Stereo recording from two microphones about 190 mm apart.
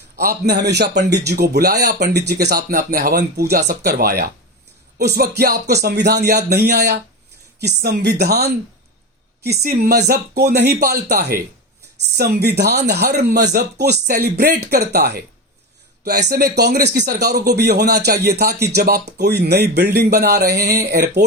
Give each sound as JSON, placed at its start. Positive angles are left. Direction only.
{"t": 0.2, "sound": "speech", "side_deg": -55}